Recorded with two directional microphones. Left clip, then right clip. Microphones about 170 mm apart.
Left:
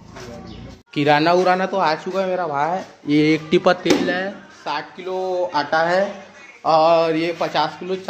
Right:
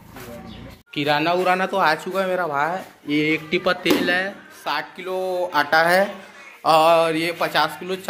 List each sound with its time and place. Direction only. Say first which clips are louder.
0.9 s speech: left 4 dB; 35° left (ahead or behind)
1.4 s speech: left 2 dB; 15° left (ahead or behind)
1.7 s speech: even; centre (ahead or behind)
3.1 s speech: left 4 dB; 30° left (ahead or behind)
3.8 s speech: even; 15° left (ahead or behind)
5.7 s speech: right 2 dB; 10° right (ahead or behind)
6.6 s mantra: even; centre (ahead or behind)
6.9 s speech: left 1 dB; 15° left (ahead or behind)